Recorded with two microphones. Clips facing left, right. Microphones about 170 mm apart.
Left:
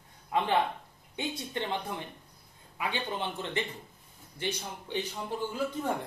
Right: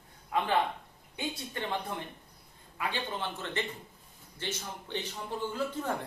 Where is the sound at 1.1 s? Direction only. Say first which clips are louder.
Left 2 dB; 20° left (ahead or behind).